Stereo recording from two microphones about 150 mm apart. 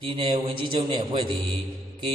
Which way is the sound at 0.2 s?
35° right (ahead or behind).